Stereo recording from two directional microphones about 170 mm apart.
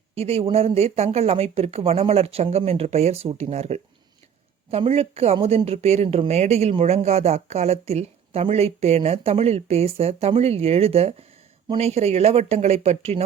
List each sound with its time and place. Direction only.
0.1 s speech: 35° right (ahead or behind)